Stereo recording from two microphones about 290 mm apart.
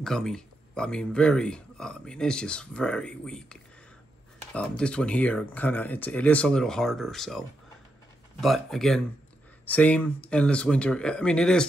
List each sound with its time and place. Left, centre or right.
0.0 s speech: centre